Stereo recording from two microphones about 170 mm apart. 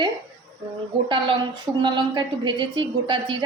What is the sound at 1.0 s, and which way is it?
A woman's voice, 30° right (ahead or behind).